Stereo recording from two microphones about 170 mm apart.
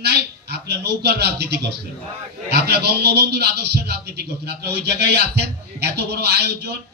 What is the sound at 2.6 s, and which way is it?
Speech, 70° right (ahead or behind).